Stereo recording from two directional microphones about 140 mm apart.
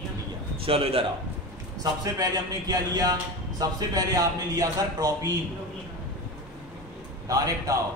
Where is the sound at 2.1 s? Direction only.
25° right (ahead or behind).